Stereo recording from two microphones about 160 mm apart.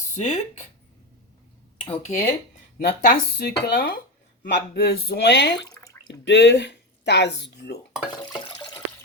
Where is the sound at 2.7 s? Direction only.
65° left (ahead or behind); by 7.8 s 90° left.